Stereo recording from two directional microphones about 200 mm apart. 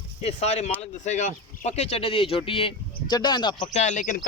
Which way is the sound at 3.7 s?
35° left (ahead or behind).